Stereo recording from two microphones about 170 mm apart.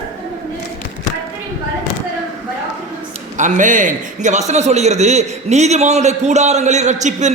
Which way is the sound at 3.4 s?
45° right (ahead or behind).